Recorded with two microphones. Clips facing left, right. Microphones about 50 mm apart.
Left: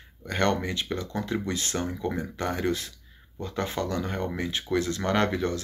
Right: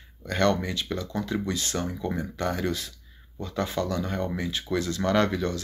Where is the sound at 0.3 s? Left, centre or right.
Left.